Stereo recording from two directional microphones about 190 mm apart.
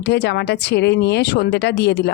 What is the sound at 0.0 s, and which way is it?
Speech, 60° left (ahead or behind).